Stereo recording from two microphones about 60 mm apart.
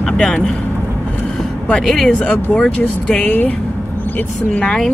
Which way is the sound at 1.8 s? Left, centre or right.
Centre.